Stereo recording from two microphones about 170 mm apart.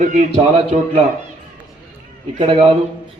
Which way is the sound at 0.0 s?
45° right (ahead or behind).